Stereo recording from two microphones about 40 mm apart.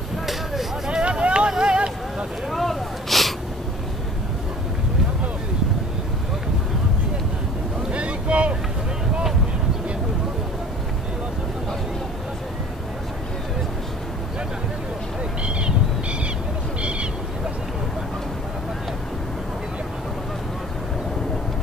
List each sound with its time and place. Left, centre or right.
0.8 s vehicle: right
1.6 s a sound: right
2.5 s snort: centre
7.9 s boat: right